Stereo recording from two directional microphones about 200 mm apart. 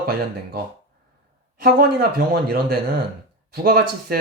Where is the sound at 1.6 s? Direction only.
50° right (ahead or behind).